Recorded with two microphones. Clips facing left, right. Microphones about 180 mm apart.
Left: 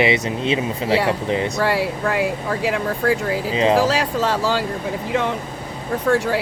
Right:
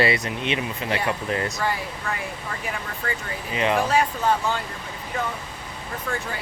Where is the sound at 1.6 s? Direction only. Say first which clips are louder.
Left 8 dB; 80° left.